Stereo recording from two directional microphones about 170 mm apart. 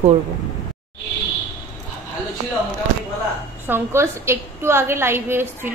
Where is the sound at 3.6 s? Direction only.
15° right (ahead or behind).